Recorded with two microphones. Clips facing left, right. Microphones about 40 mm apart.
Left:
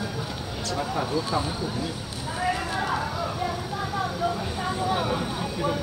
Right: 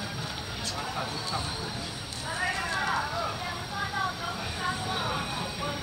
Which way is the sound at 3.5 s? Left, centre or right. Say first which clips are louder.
Left 4 dB; centre.